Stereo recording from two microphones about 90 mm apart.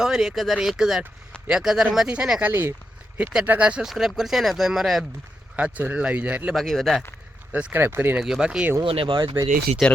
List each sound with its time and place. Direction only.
0.0 s speech: 5° right (ahead or behind)
2.4 s speech: 25° right (ahead or behind); by 5.0 s centre (ahead or behind)
5.5 s speech: 15° right (ahead or behind)
6.5 s speech: 5° left (ahead or behind)
7.5 s speech: 20° right (ahead or behind)
8.1 s speech: 5° right (ahead or behind)
8.8 s speech: 80° right
9.8 s speech: 5° left (ahead or behind)